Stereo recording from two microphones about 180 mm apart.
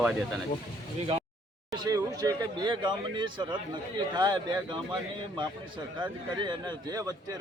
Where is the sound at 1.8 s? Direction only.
20° right (ahead or behind).